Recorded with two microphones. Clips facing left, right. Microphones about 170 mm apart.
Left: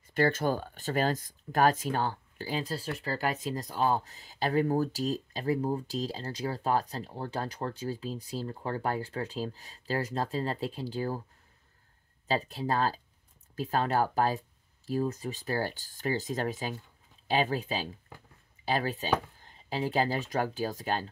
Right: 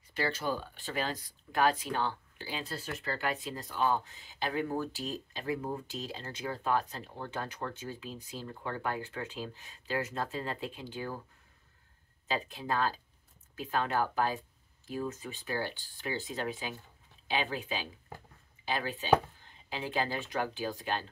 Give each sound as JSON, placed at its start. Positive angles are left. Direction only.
{"t": 0.0, "sound": "speech", "side_deg": 50}
{"t": 12.3, "sound": "speech", "side_deg": 40}